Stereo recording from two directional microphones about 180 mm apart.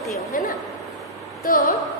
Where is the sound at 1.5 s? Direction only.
55° left (ahead or behind).